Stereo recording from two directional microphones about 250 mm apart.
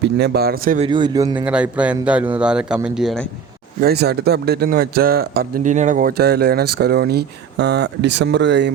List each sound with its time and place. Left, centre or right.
0.0 s a man's voice: right
0.9 s a man's voice: centre
1.5 s a man's voice: centre
3.8 s a man's voice: right